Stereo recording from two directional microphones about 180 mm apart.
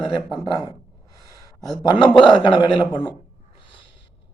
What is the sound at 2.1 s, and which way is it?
Speech, 25° left (ahead or behind).